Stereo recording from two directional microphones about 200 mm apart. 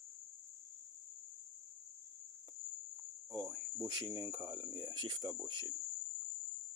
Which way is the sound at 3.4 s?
20° right (ahead or behind).